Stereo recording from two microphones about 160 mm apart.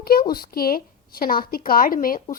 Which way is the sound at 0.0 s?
70° left (ahead or behind).